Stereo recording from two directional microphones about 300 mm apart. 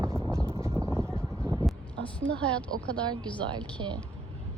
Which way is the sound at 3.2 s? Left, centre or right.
Centre.